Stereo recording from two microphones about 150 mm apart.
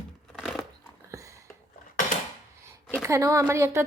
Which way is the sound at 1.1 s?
20° right (ahead or behind).